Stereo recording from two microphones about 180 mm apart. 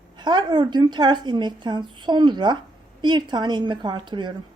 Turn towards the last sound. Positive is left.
turn(degrees=-25)  # may be behind; listen again after turning